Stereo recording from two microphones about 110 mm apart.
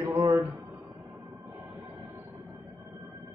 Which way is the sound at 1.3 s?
15° right (ahead or behind).